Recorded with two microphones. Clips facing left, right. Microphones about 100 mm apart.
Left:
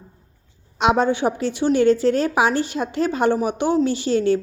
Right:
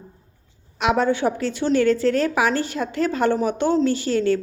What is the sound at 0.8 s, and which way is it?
A woman's voice, 20° left (ahead or behind).